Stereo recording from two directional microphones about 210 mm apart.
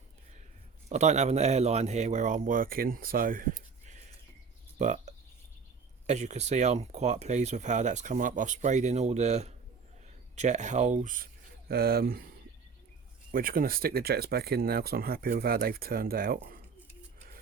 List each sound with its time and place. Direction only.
0.9 s speech: 35° right (ahead or behind)
13.3 s speech: 45° right (ahead or behind)